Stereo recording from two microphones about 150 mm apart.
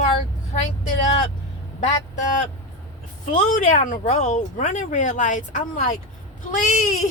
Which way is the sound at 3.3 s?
55° left (ahead or behind).